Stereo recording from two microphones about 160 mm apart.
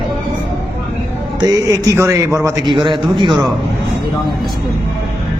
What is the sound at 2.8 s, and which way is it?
Speech, 30° right (ahead or behind).